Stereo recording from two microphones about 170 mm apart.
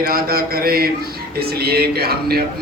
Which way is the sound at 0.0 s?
60° right (ahead or behind).